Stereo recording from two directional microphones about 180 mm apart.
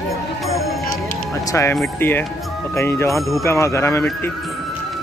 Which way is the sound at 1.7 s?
10° left (ahead or behind).